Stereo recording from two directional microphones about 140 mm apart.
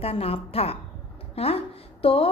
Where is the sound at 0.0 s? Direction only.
45° left (ahead or behind).